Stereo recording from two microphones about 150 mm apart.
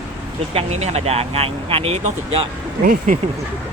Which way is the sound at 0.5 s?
45° right (ahead or behind).